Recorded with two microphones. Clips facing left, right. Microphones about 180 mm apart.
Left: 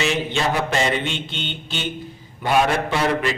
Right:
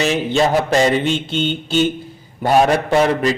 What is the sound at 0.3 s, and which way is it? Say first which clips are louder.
A man's voice: right 10 dB; 40° right (ahead or behind).